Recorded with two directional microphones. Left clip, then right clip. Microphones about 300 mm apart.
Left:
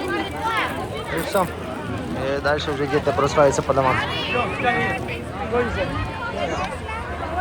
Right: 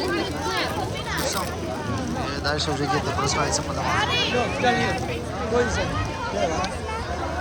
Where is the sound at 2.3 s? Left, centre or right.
Centre.